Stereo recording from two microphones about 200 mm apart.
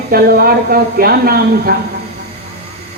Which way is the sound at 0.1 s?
50° right (ahead or behind).